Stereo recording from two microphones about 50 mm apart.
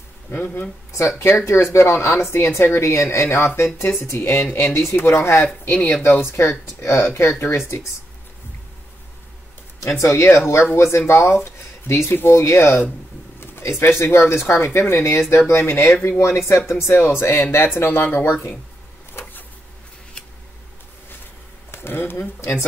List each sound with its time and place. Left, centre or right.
0.3 s speech: left
1.3 s speech: left
3.3 s speech: left
4.0 s speech: left
4.7 s speech: left
5.4 s speech: left
6.0 s speech: left
6.8 s speech: left
7.2 s speech: left
9.8 s speech: left
16.2 s speech: left
17.7 s speech: left
21.6 s speech: left
22.4 s speech: left